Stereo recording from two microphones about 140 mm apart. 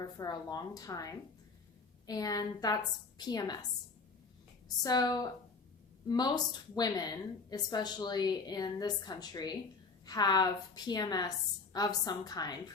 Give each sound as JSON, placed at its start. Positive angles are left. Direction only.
{"t": 0.0, "sound": "a woman's voice", "side_deg": 25}
{"t": 4.8, "sound": "a woman's voice", "side_deg": 30}